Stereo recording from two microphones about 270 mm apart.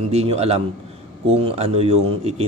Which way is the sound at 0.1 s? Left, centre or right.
Right.